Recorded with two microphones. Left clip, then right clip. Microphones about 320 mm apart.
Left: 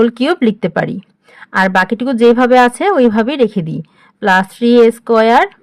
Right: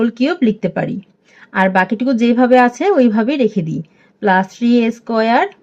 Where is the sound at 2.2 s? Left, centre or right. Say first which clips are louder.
Left 4 dB; left.